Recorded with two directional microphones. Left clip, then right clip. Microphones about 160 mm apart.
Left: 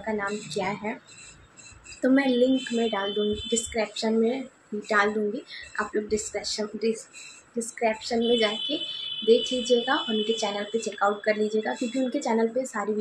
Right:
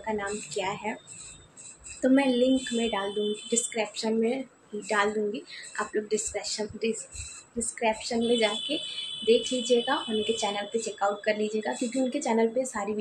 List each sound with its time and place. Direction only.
0.0 s a woman's voice: 5° left (ahead or behind)
2.0 s speech: 10° left (ahead or behind)